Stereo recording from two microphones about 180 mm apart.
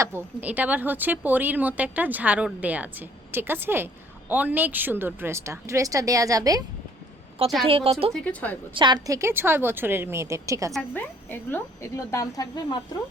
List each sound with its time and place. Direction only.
0.0 s speech: 15° right (ahead or behind)
7.7 s a woman's voice: 30° right (ahead or behind)
8.1 s speech: 10° left (ahead or behind)
8.7 s speech: 25° right (ahead or behind)
10.8 s speech: 10° left (ahead or behind)